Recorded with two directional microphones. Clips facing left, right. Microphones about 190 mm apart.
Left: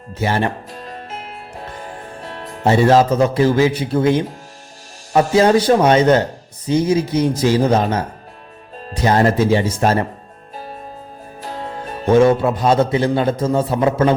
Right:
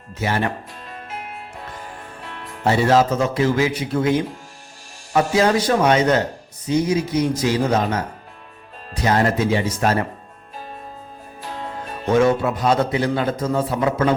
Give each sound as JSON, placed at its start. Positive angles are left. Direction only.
{"t": 0.1, "sound": "speech", "side_deg": 30}
{"t": 2.2, "sound": "music", "side_deg": 40}
{"t": 2.6, "sound": "a man's voice", "side_deg": 30}
{"t": 12.0, "sound": "a man's voice", "side_deg": 30}